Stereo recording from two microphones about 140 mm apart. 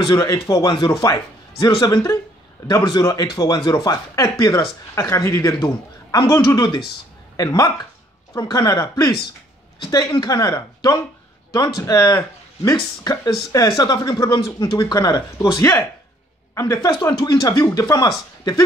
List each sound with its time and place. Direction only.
0.0 s speech: 25° left (ahead or behind)